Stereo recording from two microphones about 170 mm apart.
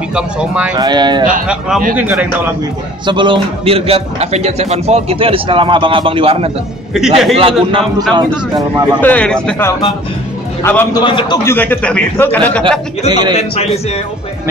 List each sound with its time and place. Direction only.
0.1 s speech: 5° right (ahead or behind)
0.7 s speech: 25° right (ahead or behind)
2.0 s a man's voice: 10° right (ahead or behind)
3.1 s speech: 30° right (ahead or behind)
6.9 s speech: centre (ahead or behind)
7.3 s speech: 35° right (ahead or behind)
9.0 s a man's voice: 5° left (ahead or behind)
10.9 s a man's voice: 25° left (ahead or behind)
11.4 s a man's voice: 10° left (ahead or behind)
13.1 s speech: 25° right (ahead or behind)